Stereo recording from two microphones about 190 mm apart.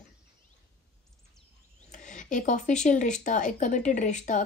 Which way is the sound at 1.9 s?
40° left (ahead or behind).